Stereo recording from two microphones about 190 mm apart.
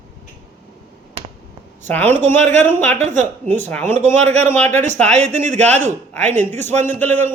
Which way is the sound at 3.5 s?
10° left (ahead or behind).